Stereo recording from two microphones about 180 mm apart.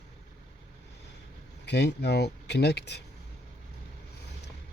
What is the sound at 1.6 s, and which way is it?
Speech, 70° left (ahead or behind).